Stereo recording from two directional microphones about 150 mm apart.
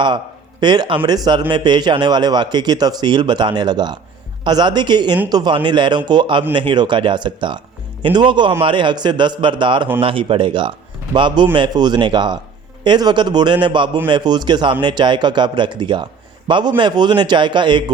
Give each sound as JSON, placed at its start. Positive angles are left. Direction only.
{"t": 0.6, "sound": "a man's voice", "side_deg": -30}